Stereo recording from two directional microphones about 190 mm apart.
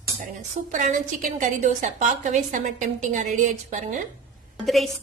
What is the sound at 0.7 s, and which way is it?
A woman's voice, 40° right (ahead or behind).